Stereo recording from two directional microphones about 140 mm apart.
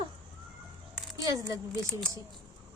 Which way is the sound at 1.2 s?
20° right (ahead or behind).